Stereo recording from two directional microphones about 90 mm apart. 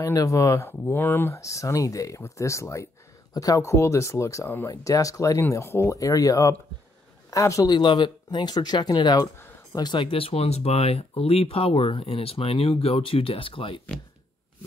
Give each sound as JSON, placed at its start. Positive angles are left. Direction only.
{"t": 0.0, "sound": "a man's voice", "side_deg": 35}
{"t": 7.7, "sound": "speech", "side_deg": 55}
{"t": 11.0, "sound": "speech", "side_deg": 90}